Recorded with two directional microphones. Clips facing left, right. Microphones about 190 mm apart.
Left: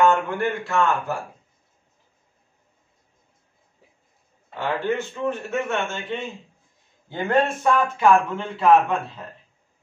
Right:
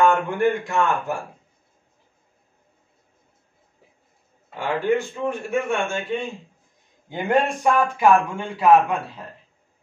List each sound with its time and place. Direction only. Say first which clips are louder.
0.0 s speech: right 1 dB; 15° right (ahead or behind)
4.6 s speech: right 3 dB; 10° right (ahead or behind)